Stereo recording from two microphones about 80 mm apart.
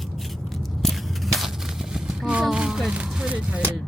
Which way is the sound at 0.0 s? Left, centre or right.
Centre.